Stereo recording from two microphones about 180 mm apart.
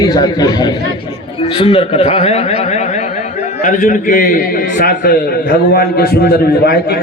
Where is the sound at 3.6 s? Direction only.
45° left (ahead or behind).